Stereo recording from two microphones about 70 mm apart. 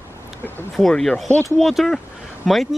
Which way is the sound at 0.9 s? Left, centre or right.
Centre.